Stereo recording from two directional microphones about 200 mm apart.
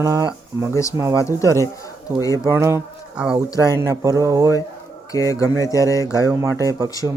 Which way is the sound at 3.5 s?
15° left (ahead or behind).